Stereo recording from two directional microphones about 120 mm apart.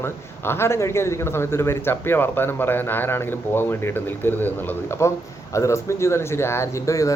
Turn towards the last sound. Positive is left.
turn(degrees=25)  # may be behind; listen again after turning